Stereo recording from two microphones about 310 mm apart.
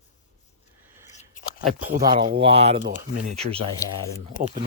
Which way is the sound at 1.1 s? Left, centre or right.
Left.